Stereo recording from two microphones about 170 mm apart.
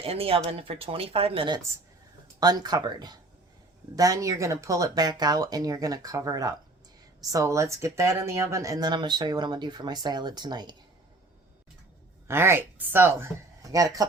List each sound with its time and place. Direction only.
0.0 s speech: 35° right (ahead or behind)
12.3 s speech: 15° right (ahead or behind)